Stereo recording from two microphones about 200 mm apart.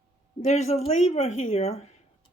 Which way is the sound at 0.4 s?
35° left (ahead or behind).